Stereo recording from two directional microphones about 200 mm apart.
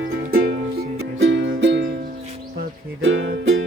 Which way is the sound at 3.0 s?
70° right (ahead or behind).